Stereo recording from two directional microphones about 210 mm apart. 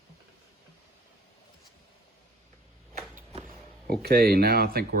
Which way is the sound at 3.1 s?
30° right (ahead or behind).